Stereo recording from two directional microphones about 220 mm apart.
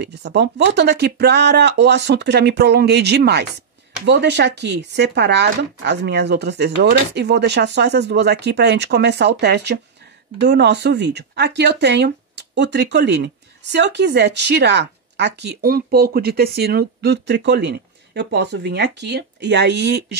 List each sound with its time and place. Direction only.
0.0 s speech: 50° right (ahead or behind)